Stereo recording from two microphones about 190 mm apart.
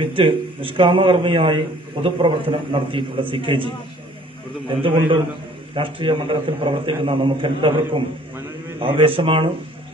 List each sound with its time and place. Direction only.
0.0 s a man's voice: 25° right (ahead or behind)
4.6 s a man's voice: 25° right (ahead or behind)